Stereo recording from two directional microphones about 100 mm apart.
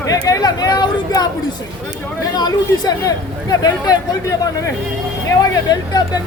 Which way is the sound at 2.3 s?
40° left (ahead or behind).